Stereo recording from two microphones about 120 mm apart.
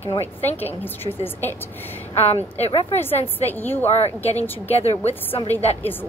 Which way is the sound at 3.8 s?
65° left (ahead or behind).